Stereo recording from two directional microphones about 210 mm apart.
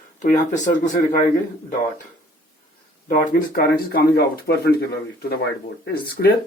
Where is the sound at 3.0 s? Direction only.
40° left (ahead or behind).